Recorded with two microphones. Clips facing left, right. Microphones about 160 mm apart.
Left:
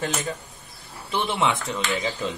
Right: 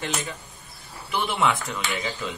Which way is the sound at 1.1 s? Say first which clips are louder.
Even; 20° left (ahead or behind).